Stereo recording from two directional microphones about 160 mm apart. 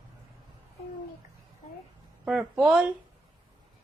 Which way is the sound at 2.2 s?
5° right (ahead or behind).